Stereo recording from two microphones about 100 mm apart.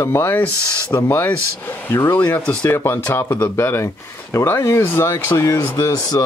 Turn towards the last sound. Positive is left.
turn(degrees=40)  # may be behind; listen again after turning